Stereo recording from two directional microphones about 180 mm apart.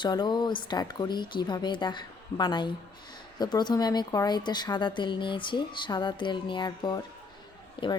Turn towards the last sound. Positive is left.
turn(degrees=30)  # may be behind; listen again after turning